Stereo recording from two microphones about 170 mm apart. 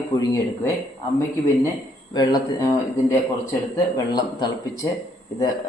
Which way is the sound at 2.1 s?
25° left (ahead or behind).